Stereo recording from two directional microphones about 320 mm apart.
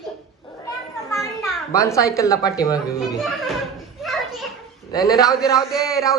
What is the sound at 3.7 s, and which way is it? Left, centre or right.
Children playing, centre.